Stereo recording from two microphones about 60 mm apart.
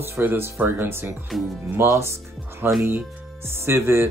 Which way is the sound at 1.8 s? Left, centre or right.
Right.